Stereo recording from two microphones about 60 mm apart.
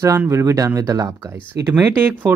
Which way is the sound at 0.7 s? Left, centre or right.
Right.